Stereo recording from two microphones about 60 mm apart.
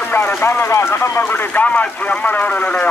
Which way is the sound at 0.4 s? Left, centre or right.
Left.